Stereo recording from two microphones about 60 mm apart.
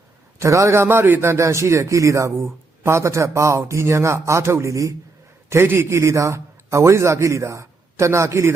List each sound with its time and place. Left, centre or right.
0.3 s a man's voice: right
5.5 s a man's voice: right